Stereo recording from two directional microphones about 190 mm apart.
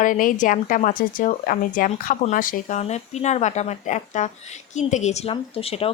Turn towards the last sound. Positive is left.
turn(degrees=30)  # may be behind; listen again after turning